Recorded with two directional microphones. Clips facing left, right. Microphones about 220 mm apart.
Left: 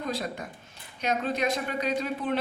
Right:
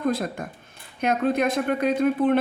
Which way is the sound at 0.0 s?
50° right (ahead or behind).